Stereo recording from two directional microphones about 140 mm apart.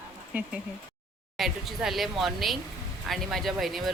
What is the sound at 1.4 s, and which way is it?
Speech, centre (ahead or behind).